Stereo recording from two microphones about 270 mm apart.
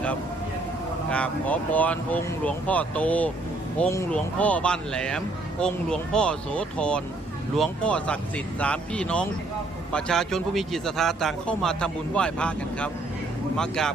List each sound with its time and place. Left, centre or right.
1.1 s speech: centre